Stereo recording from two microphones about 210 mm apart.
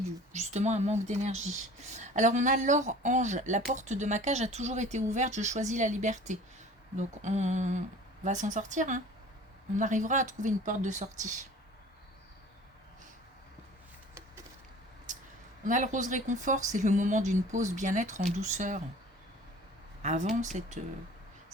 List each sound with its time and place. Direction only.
0.3 s speech: 35° right (ahead or behind)
15.6 s speech: 35° right (ahead or behind)
20.0 s speech: 35° right (ahead or behind)